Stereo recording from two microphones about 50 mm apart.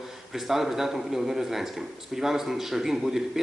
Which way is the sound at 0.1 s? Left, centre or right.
Centre.